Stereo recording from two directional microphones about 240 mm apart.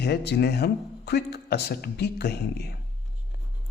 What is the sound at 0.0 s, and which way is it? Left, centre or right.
A man's voice, left.